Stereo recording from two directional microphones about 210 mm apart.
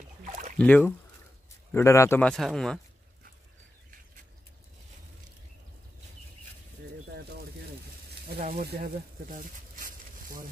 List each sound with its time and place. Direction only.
0.6 s speech: 10° left (ahead or behind)
8.4 s speech: 45° right (ahead or behind)